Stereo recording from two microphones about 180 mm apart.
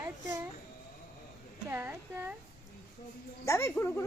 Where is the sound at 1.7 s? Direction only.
10° right (ahead or behind).